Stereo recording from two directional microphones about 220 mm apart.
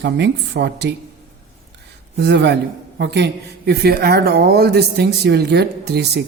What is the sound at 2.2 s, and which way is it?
Speech, 50° right (ahead or behind).